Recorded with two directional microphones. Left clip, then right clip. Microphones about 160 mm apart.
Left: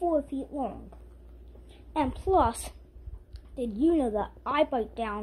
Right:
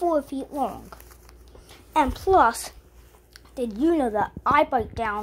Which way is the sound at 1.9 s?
15° right (ahead or behind).